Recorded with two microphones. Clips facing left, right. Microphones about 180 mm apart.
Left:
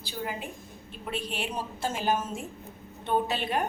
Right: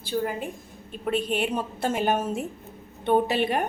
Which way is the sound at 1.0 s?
55° right (ahead or behind).